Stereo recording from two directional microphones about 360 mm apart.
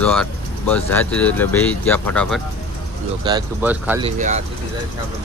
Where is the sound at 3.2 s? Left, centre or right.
Centre.